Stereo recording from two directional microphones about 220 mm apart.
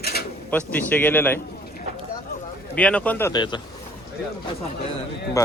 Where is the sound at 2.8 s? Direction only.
5° left (ahead or behind).